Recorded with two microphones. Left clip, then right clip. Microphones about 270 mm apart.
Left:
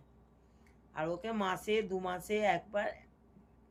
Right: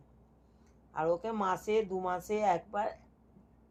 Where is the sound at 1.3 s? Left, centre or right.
Centre.